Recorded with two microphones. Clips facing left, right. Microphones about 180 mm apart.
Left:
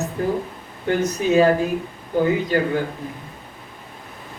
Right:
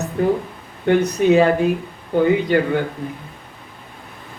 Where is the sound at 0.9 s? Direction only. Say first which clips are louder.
Right 5 dB; 65° right (ahead or behind).